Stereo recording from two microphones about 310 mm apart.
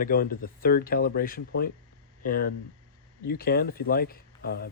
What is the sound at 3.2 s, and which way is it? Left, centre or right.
Speech, left.